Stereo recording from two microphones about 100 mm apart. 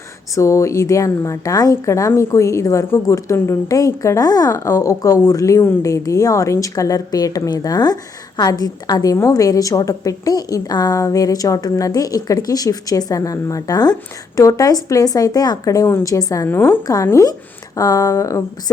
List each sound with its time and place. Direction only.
0.3 s a woman's voice: 30° left (ahead or behind)
16.5 s a woman's voice: 20° left (ahead or behind)
16.8 s a woman's voice: 35° left (ahead or behind)